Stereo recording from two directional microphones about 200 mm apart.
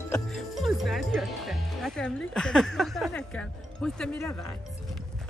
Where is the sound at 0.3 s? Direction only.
Centre (ahead or behind).